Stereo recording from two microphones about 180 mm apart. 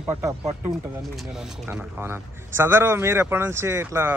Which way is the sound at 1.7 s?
10° right (ahead or behind).